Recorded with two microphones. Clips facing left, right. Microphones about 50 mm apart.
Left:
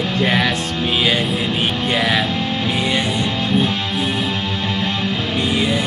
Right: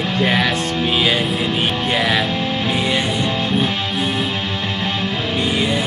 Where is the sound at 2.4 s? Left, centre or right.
Centre.